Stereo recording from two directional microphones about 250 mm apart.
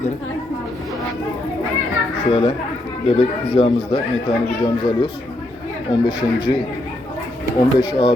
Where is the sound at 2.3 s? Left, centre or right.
Left.